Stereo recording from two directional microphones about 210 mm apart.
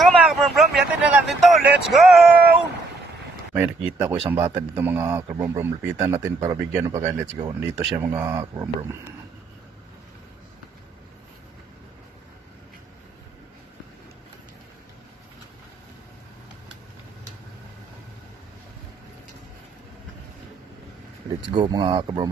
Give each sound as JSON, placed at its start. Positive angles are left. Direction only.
{"t": 0.0, "sound": "vehicle", "side_deg": 0}
{"t": 3.5, "sound": "speech", "side_deg": -10}
{"t": 21.5, "sound": "speech", "side_deg": -20}